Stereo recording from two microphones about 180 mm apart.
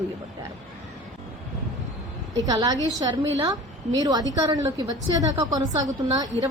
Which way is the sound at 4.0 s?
20° right (ahead or behind).